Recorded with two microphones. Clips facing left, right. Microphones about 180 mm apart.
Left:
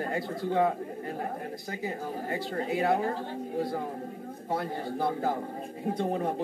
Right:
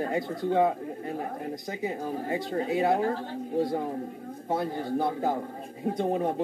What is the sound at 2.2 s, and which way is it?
Speech, 20° right (ahead or behind).